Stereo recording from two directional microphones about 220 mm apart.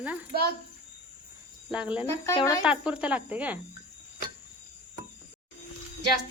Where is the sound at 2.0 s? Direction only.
15° left (ahead or behind).